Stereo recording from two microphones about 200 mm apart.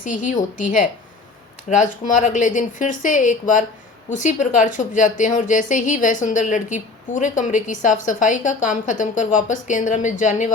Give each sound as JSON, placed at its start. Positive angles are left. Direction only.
{"t": 0.0, "sound": "a woman's voice", "side_deg": 40}